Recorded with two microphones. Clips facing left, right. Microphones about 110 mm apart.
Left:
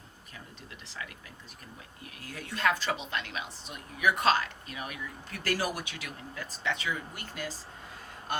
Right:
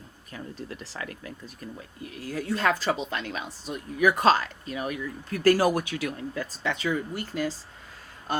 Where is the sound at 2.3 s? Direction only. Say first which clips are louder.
Right 4 dB; 35° right (ahead or behind).